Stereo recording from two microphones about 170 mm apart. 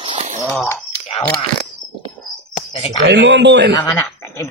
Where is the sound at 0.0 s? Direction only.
30° right (ahead or behind).